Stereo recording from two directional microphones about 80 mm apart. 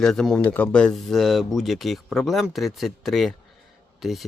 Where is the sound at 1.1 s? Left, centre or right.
Centre.